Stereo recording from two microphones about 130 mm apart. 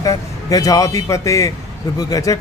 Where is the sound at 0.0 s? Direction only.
25° left (ahead or behind).